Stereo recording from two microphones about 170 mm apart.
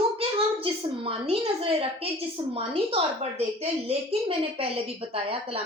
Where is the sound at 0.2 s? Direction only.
35° right (ahead or behind).